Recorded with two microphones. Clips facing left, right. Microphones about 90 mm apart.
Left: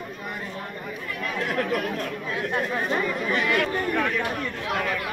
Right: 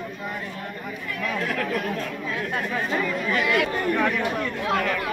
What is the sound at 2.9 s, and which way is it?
Speech, 20° left (ahead or behind).